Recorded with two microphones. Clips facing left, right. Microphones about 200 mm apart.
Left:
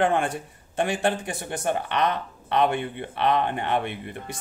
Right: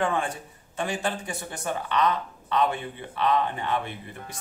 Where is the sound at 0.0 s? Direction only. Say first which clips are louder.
Left 4 dB; 60° left (ahead or behind).